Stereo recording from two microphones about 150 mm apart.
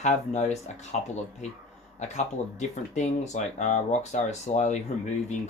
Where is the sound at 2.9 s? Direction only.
50° left (ahead or behind).